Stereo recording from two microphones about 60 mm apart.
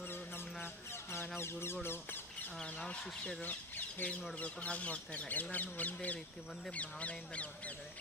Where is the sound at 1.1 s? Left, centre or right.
Left.